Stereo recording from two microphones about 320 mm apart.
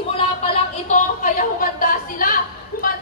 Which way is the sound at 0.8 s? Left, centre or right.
Left.